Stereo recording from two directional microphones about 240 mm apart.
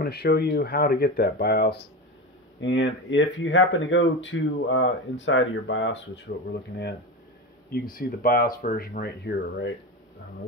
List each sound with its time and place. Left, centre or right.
0.0 s speech: left
7.7 s speech: left